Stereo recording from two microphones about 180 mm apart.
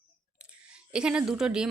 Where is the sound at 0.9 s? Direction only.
5° right (ahead or behind).